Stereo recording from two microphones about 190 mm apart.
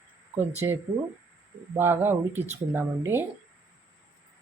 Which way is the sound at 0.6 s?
20° right (ahead or behind).